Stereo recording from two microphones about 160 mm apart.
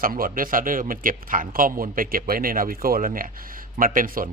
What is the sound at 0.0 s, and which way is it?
A man's voice, 60° right (ahead or behind).